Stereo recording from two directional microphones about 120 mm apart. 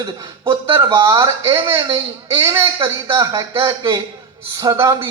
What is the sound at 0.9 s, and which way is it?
Speech, 25° right (ahead or behind).